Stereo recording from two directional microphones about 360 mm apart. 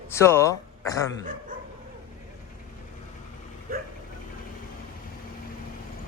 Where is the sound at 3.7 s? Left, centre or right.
Right.